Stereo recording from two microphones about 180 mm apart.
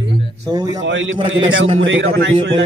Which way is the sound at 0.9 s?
90° right.